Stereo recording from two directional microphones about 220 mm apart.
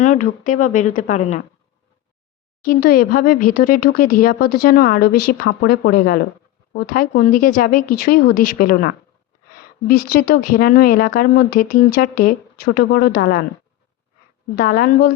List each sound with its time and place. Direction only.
0.0 s a woman's voice: 35° left (ahead or behind)
2.6 s a woman's voice: 45° left (ahead or behind)
14.5 s a woman's voice: 40° left (ahead or behind)